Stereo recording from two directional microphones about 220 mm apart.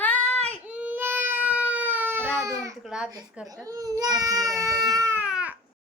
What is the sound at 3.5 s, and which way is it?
Speech, 15° right (ahead or behind).